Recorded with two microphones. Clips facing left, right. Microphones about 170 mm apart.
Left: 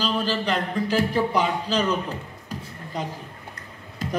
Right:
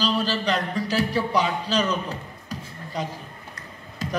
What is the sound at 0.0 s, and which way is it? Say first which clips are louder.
A man's voice: right 1 dB; 55° left (ahead or behind).